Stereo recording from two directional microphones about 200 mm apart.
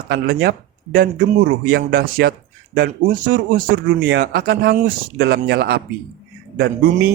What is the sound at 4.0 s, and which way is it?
Speech, 60° right (ahead or behind).